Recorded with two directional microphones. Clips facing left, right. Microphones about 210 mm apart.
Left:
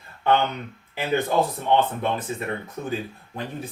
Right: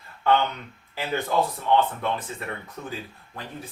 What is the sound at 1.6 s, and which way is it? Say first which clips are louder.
Speech: left 1 dB; 20° left (ahead or behind).